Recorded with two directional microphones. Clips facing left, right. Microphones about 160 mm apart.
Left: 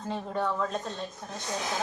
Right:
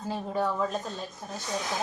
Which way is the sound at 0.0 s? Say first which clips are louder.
Right 1 dB; 5° right (ahead or behind).